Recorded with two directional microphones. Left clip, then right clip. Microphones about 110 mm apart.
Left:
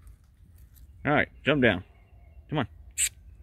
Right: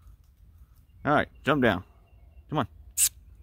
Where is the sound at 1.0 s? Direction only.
30° right (ahead or behind).